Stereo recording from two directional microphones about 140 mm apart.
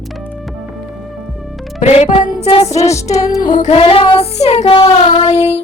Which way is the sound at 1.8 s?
50° left (ahead or behind).